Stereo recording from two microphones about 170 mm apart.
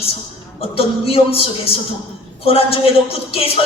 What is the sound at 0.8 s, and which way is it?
Speech, 35° left (ahead or behind).